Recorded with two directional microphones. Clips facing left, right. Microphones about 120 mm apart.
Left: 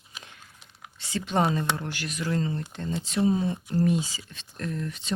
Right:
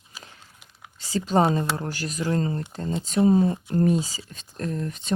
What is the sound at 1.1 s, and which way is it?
Speech, 40° right (ahead or behind).